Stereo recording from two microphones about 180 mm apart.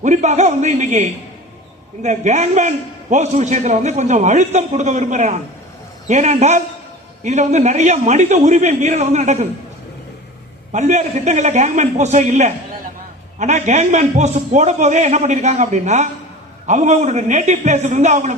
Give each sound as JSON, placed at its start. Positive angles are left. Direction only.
{"t": 0.0, "sound": "a man's voice", "side_deg": -40}
{"t": 10.7, "sound": "a man's voice", "side_deg": -40}